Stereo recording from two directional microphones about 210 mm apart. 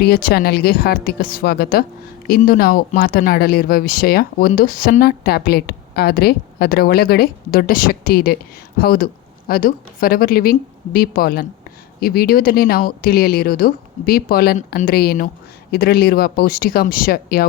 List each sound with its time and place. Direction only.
0.0 s speech: 45° left (ahead or behind)